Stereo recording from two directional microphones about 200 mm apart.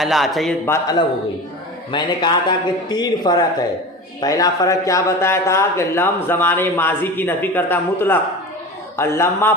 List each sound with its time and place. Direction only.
0.0 s a man's voice: centre (ahead or behind)
0.6 s a man's voice: 15° left (ahead or behind)